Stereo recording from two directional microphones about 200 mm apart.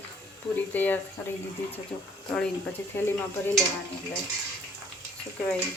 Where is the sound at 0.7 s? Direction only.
10° left (ahead or behind).